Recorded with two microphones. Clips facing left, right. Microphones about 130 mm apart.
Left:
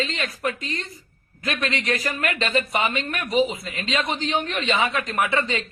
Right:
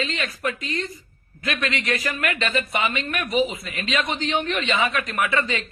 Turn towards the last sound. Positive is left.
turn(degrees=25)  # may be behind; listen again after turning